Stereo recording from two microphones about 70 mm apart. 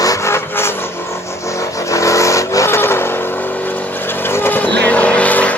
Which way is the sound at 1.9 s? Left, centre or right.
Left.